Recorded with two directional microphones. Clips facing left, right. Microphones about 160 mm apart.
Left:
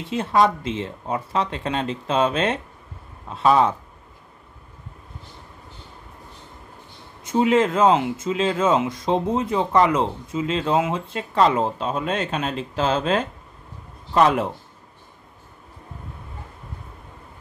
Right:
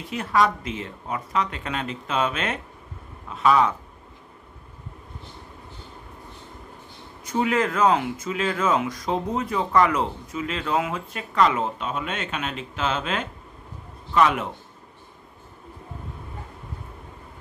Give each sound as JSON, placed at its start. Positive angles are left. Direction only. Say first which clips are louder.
{"t": 0.0, "sound": "speech", "louder": "left 3 dB", "side_deg": 25}
{"t": 7.2, "sound": "speech", "louder": "left 5 dB", "side_deg": 25}